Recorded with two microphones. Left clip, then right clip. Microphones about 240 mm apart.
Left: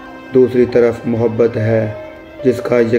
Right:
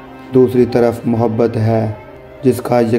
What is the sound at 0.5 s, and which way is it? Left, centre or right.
A man's voice, right.